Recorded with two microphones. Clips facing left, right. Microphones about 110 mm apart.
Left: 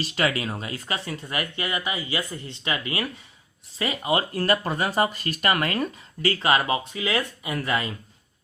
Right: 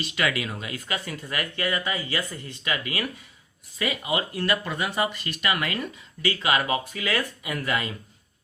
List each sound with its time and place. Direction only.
0.0 s speech: 35° left (ahead or behind)
6.9 s speech: 25° left (ahead or behind)